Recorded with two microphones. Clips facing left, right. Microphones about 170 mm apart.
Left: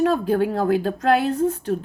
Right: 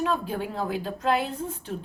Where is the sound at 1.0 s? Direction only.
75° left (ahead or behind).